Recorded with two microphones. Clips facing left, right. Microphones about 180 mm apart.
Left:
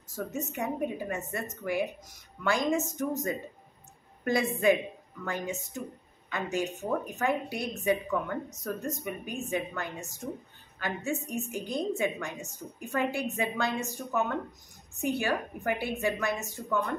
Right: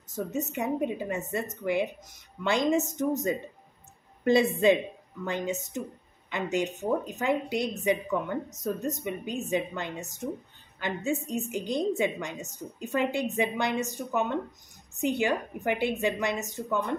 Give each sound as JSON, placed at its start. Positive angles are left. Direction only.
{"t": 0.5, "sound": "a woman's voice", "side_deg": -20}